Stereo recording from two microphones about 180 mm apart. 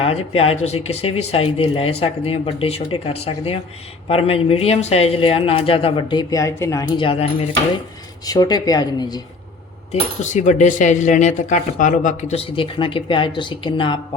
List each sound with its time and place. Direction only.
0.0 s speech: 35° left (ahead or behind)
8.3 s speech: 20° left (ahead or behind)
9.9 s speech: 40° left (ahead or behind)